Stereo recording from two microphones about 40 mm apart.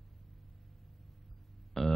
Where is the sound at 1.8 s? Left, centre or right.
Centre.